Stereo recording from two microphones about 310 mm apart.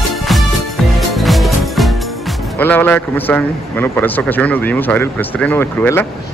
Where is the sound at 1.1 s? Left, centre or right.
Centre.